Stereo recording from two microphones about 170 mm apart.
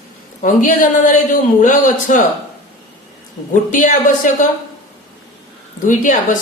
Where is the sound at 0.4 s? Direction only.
50° left (ahead or behind).